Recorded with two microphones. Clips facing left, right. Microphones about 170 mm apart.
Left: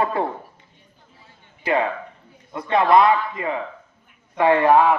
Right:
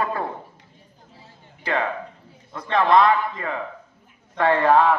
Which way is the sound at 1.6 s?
20° left (ahead or behind).